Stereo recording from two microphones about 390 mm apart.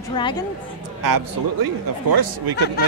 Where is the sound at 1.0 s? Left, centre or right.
Right.